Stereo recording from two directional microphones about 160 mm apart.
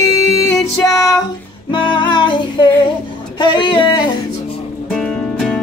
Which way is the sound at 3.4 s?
30° left (ahead or behind).